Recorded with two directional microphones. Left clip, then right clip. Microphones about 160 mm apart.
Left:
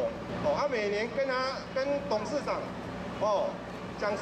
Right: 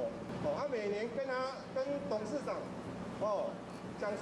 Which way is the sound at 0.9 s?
5° left (ahead or behind).